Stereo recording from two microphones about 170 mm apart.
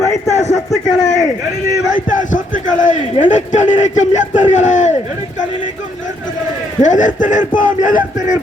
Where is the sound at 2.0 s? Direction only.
50° left (ahead or behind).